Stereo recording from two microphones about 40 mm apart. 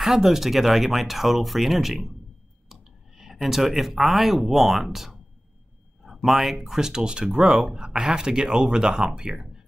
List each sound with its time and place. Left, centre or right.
0.0 s speech: centre
6.8 s speech: centre